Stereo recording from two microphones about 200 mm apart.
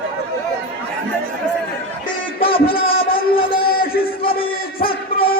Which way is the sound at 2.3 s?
30° left (ahead or behind).